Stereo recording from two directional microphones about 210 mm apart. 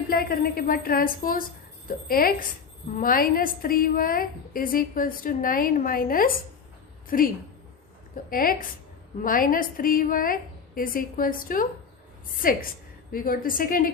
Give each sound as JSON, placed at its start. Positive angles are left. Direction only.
{"t": 0.1, "sound": "a woman's voice", "side_deg": 45}
{"t": 8.3, "sound": "a woman's voice", "side_deg": 45}